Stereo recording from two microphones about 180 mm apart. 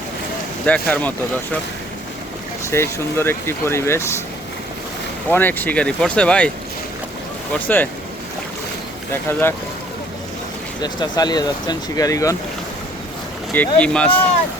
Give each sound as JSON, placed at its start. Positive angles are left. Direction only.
{"t": 0.6, "sound": "speech", "side_deg": 10}
{"t": 2.6, "sound": "speech", "side_deg": 15}
{"t": 5.3, "sound": "speech", "side_deg": 10}
{"t": 7.5, "sound": "speech", "side_deg": 10}
{"t": 10.8, "sound": "speech", "side_deg": 25}
{"t": 13.5, "sound": "speech", "side_deg": 10}